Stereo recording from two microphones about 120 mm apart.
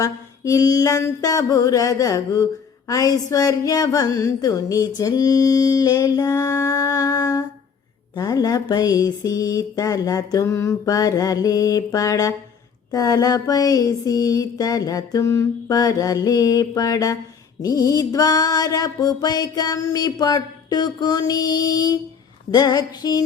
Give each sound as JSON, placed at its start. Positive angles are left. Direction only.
{"t": 0.0, "sound": "speech", "side_deg": 25}
{"t": 12.9, "sound": "music", "side_deg": 30}